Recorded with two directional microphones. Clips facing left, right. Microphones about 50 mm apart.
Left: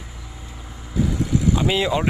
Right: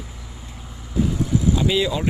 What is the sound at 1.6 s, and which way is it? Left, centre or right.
Speech, left.